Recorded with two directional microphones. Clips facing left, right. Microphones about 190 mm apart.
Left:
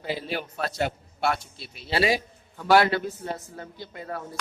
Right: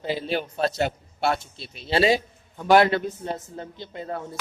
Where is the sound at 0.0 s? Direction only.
25° right (ahead or behind).